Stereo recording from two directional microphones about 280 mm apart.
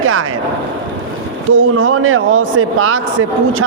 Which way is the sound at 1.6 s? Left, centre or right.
Right.